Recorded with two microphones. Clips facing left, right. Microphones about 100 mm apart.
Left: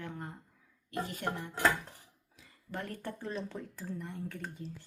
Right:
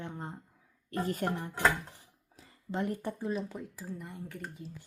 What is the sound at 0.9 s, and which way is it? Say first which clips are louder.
Speech: right 4 dB; 40° right (ahead or behind).